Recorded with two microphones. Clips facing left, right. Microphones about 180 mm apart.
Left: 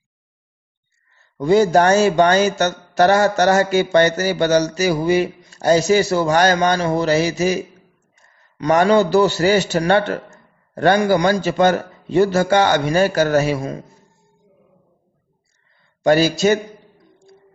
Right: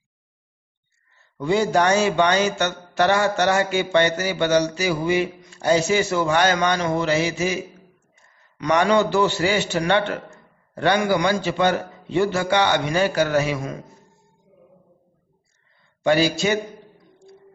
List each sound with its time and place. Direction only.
1.4 s speech: 40° left (ahead or behind)
16.0 s speech: 40° left (ahead or behind)